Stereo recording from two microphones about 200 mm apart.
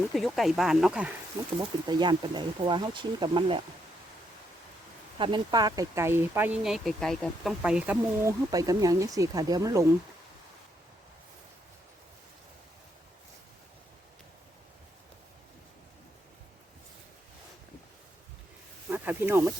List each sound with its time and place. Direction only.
0.1 s speech: centre (ahead or behind)
1.5 s speech: 20° right (ahead or behind)
5.1 s speech: 25° right (ahead or behind)
18.9 s snake: 10° right (ahead or behind)